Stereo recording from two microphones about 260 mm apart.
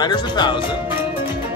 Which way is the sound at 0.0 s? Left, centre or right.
Centre.